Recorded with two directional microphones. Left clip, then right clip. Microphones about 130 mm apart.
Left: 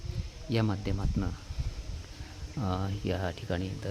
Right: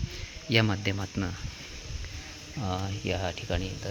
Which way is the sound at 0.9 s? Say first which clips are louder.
Right 2 dB; 5° right (ahead or behind).